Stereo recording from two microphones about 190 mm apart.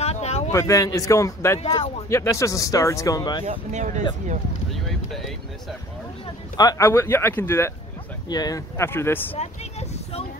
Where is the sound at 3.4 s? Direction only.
40° right (ahead or behind).